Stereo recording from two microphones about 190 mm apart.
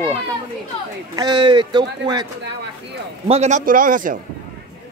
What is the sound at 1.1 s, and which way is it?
Speech, 20° right (ahead or behind).